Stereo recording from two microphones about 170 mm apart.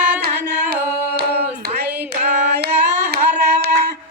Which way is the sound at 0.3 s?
70° right (ahead or behind).